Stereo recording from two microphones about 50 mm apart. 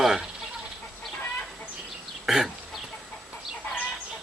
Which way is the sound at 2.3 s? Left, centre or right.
Centre.